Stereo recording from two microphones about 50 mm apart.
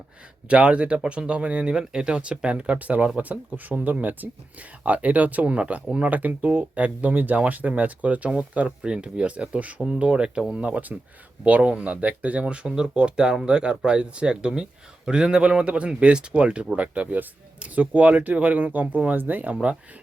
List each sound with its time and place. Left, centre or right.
0.4 s speech: right